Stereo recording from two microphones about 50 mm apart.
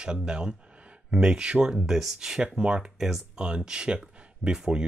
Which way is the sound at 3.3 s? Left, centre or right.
Centre.